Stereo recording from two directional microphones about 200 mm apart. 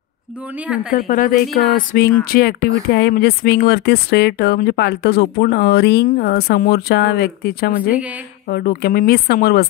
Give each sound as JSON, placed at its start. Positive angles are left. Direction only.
{"t": 0.6, "sound": "speech", "side_deg": -5}
{"t": 0.9, "sound": "speech", "side_deg": 40}